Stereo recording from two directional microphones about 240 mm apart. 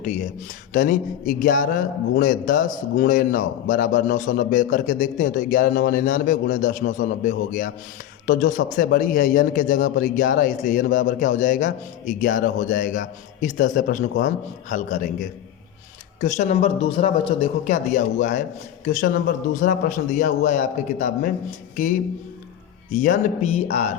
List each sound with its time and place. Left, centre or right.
0.0 s speech: left